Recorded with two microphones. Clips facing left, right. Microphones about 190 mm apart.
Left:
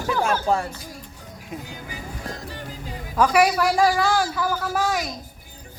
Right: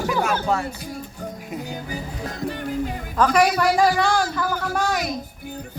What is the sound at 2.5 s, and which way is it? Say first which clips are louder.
Music: right 9 dB; 60° right (ahead or behind).